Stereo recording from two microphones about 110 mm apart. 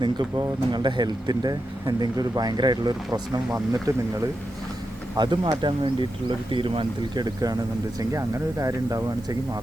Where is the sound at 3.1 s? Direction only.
30° right (ahead or behind).